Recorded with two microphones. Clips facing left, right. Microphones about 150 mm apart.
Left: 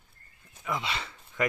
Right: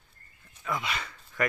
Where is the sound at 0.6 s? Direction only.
25° left (ahead or behind).